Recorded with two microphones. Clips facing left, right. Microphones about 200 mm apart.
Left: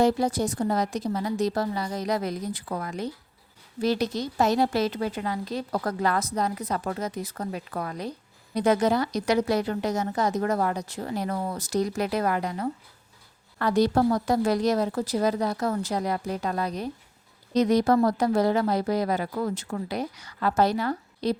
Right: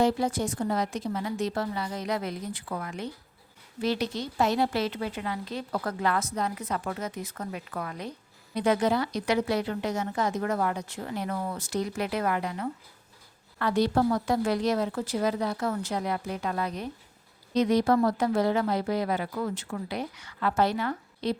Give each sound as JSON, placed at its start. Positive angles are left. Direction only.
{"t": 0.0, "sound": "a woman's voice", "side_deg": 40}